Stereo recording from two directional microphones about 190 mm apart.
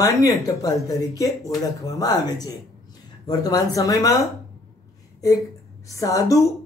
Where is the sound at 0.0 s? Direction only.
20° left (ahead or behind).